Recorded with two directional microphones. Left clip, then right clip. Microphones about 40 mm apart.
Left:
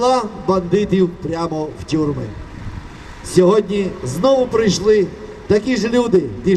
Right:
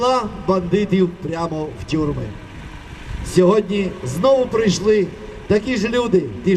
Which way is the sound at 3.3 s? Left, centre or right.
Left.